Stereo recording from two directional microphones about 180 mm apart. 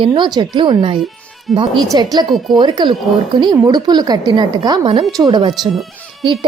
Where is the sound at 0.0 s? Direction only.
30° right (ahead or behind).